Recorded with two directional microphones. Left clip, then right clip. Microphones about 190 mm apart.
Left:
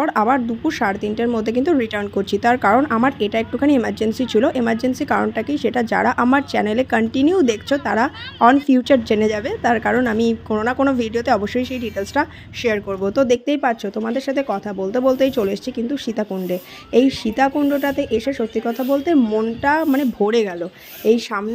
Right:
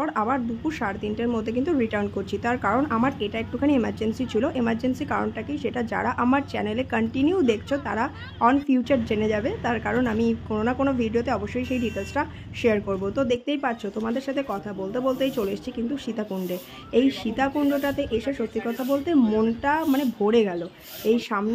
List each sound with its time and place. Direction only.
0.0 s a woman's voice: 30° left (ahead or behind)